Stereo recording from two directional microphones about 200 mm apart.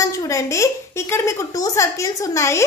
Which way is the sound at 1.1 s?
15° left (ahead or behind).